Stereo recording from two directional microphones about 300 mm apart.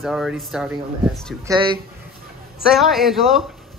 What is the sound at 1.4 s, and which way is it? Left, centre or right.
Speech, centre.